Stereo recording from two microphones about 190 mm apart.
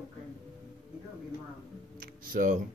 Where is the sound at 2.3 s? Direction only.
45° right (ahead or behind).